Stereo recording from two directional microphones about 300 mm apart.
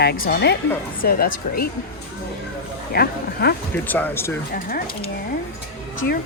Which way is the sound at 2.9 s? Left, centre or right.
Left.